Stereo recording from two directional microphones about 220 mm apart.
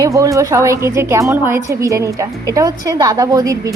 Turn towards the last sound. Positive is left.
turn(degrees=-15)  # may be behind; listen again after turning